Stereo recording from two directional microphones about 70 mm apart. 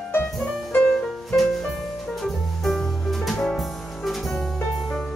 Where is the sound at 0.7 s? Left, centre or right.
Left.